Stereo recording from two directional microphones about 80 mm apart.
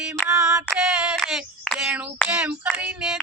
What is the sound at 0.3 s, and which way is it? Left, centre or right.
Music, centre.